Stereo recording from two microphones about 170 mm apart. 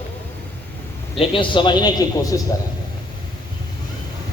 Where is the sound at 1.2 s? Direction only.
30° left (ahead or behind).